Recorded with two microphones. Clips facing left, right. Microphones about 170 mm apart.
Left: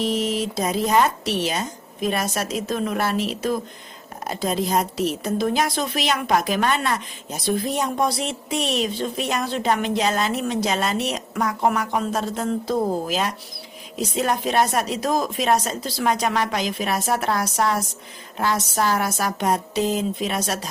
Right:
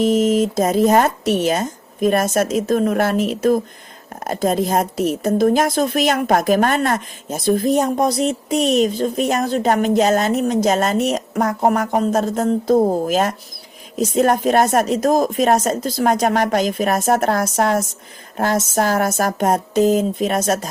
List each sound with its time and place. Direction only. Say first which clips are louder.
0.0 s a woman's voice: right 8 dB; 50° right (ahead or behind)